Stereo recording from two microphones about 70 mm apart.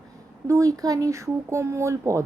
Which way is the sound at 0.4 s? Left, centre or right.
Right.